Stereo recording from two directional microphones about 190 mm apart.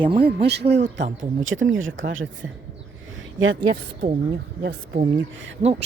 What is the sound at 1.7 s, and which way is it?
Speech, 90° right.